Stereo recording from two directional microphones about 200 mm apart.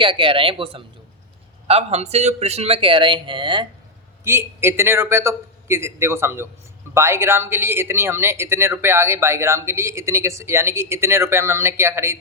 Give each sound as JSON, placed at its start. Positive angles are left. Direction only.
{"t": 0.0, "sound": "a man's voice", "side_deg": -25}
{"t": 4.2, "sound": "speech", "side_deg": -15}